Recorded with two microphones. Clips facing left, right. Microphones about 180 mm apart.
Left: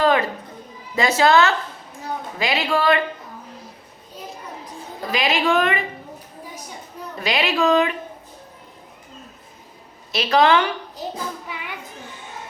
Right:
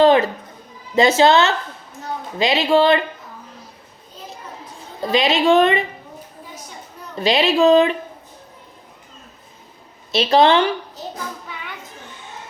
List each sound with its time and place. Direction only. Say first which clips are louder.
0.0 s a sound: right 5 dB; 25° right (ahead or behind)
0.9 s speech: right 3 dB; 25° right (ahead or behind)
5.1 s speech: right 5 dB; 25° right (ahead or behind)
7.2 s speech: right 6 dB; 25° right (ahead or behind)
10.1 s speech: right 3 dB; 25° right (ahead or behind)